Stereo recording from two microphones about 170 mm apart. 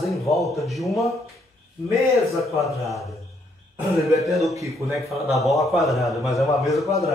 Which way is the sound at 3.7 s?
20° right (ahead or behind).